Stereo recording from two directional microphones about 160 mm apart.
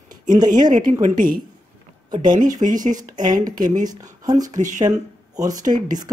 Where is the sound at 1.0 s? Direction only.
55° right (ahead or behind).